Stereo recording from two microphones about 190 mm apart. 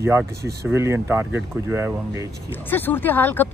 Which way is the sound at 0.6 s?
15° right (ahead or behind).